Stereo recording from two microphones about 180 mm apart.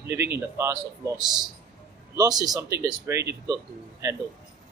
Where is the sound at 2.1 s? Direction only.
20° right (ahead or behind).